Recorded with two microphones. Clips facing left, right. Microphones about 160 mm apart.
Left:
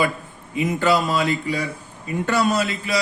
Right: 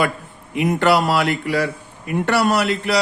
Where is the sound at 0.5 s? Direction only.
70° right (ahead or behind).